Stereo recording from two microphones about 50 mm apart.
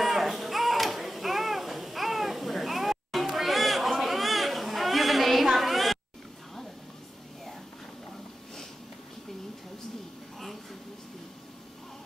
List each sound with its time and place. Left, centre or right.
0.0 s music: centre